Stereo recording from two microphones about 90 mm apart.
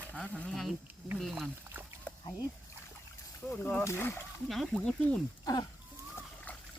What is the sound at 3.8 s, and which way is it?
Speech, 25° left (ahead or behind).